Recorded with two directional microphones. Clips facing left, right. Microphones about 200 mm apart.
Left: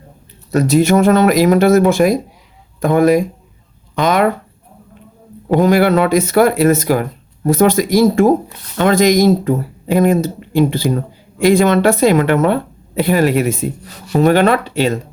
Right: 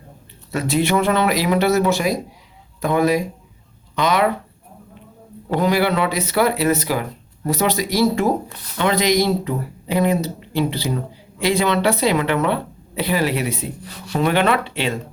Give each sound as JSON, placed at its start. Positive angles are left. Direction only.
{"t": 0.5, "sound": "speech", "side_deg": 45}
{"t": 5.5, "sound": "speech", "side_deg": 50}